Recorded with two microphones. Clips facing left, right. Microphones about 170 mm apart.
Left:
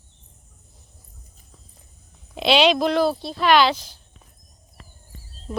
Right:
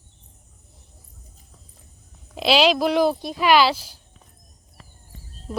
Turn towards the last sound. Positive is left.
turn(degrees=-5)  # may be behind; listen again after turning